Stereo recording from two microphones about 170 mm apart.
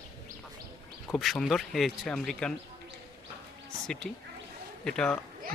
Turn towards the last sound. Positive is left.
turn(degrees=5)  # may be behind; listen again after turning